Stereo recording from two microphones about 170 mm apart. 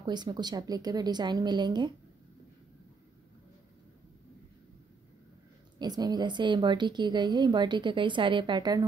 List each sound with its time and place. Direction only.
0.0 s speech: 25° right (ahead or behind)
5.8 s speech: 25° right (ahead or behind)